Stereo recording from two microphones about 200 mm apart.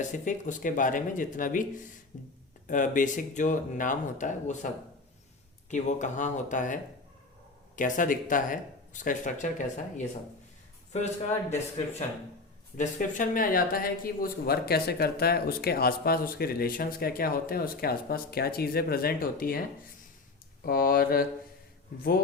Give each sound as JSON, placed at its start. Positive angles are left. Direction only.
{"t": 0.0, "sound": "speech", "side_deg": 40}
{"t": 5.7, "sound": "speech", "side_deg": 40}
{"t": 7.8, "sound": "speech", "side_deg": 40}
{"t": 10.9, "sound": "speech", "side_deg": 35}
{"t": 12.7, "sound": "speech", "side_deg": 40}
{"t": 20.7, "sound": "speech", "side_deg": 50}